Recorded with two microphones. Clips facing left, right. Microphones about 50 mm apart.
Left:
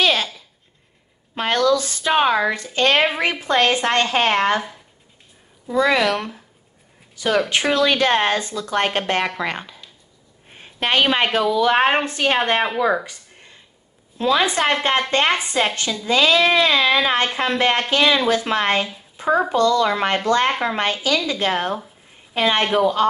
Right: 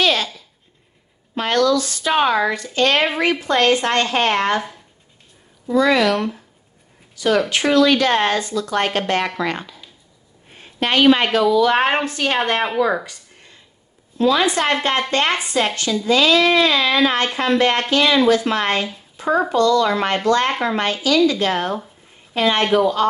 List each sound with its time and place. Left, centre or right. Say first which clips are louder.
0.0 s a sound: right 1 dB; left
1.3 s speech: right 1 dB; left
2.5 s speech: even; left
5.7 s speech: right 2 dB; left
10.5 s a sound: right 1 dB; left
11.5 s speech: right 1 dB; left
14.1 s speech: right 2 dB; left
19.1 s a sound: even; centre
19.5 s a woman's voice: right 1 dB; left